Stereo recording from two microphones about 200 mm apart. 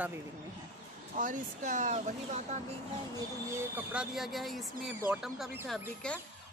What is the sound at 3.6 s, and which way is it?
Speech, 5° right (ahead or behind).